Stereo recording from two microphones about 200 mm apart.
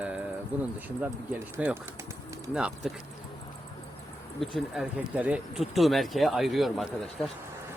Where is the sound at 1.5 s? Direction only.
10° right (ahead or behind).